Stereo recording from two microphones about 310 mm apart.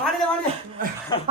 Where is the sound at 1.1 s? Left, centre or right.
Centre.